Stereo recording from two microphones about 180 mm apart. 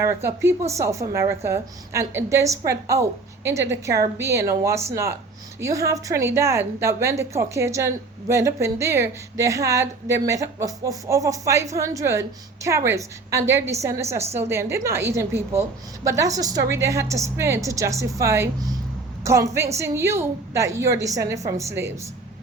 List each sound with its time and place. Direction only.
0.0 s a woman's voice: 15° right (ahead or behind)